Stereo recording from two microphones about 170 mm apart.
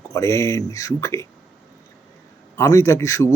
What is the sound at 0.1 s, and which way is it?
Speech, 15° left (ahead or behind).